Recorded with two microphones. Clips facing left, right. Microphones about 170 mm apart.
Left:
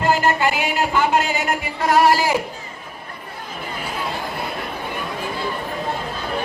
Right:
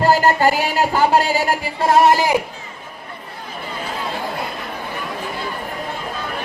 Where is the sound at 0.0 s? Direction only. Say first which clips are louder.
Right 4 dB; 35° right (ahead or behind); by 2.3 s 20° right (ahead or behind).